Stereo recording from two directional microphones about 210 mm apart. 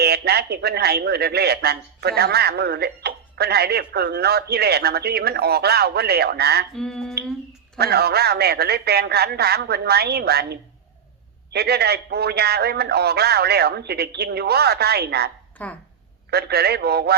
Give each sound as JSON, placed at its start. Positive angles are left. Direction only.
{"t": 0.0, "sound": "speech", "side_deg": -50}
{"t": 6.7, "sound": "a sound", "side_deg": 0}
{"t": 7.8, "sound": "speech", "side_deg": -50}
{"t": 15.6, "sound": "speech", "side_deg": 5}
{"t": 16.3, "sound": "speech", "side_deg": -50}